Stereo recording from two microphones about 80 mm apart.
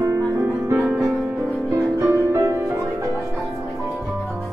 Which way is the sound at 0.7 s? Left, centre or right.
Right.